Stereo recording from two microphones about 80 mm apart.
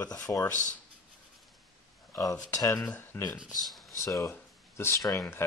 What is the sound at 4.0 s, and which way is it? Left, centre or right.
Speech, left.